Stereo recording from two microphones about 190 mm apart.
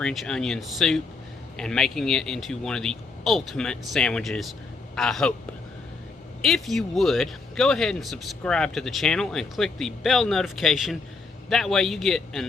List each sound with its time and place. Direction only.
0.0 s speech: centre (ahead or behind)
6.4 s speech: centre (ahead or behind)